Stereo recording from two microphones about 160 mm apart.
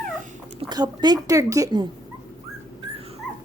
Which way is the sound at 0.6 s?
25° right (ahead or behind).